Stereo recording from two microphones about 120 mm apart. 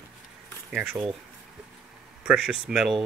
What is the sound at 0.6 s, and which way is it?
Speech, 10° right (ahead or behind).